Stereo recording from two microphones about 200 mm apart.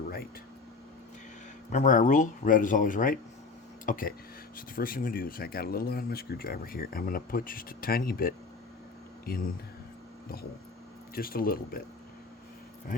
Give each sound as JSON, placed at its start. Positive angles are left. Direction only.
{"t": 1.7, "sound": "speech", "side_deg": 40}
{"t": 11.1, "sound": "speech", "side_deg": 45}